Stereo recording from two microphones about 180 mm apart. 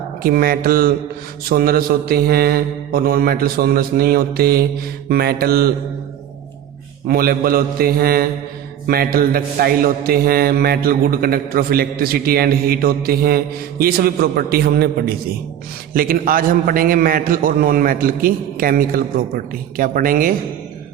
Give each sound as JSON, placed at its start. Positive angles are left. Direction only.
{"t": 0.2, "sound": "a man's voice", "side_deg": -55}
{"t": 1.5, "sound": "mantra", "side_deg": -55}
{"t": 7.1, "sound": "mantra", "side_deg": -55}
{"t": 16.0, "sound": "a man's voice", "side_deg": -50}